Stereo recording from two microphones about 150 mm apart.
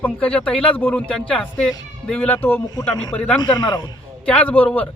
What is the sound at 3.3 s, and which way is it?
Speech, 30° left (ahead or behind).